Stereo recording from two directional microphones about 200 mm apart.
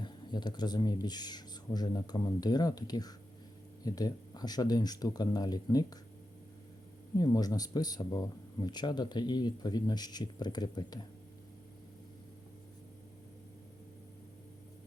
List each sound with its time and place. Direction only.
0.0 s speech: 20° left (ahead or behind)
7.2 s speech: 20° left (ahead or behind)